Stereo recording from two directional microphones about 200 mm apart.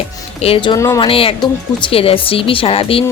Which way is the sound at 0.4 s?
25° left (ahead or behind).